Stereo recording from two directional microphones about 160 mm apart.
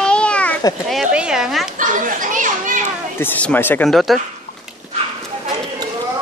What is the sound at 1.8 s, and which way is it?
Children playing, 55° right (ahead or behind).